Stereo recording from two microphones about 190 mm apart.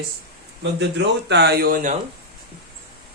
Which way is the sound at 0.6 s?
65° right (ahead or behind).